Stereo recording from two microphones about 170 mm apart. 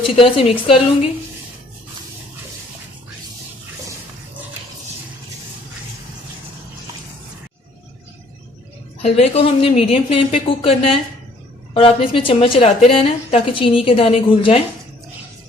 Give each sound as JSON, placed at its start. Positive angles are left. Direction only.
{"t": 0.2, "sound": "a woman's voice", "side_deg": 35}
{"t": 9.0, "sound": "a woman's voice", "side_deg": 40}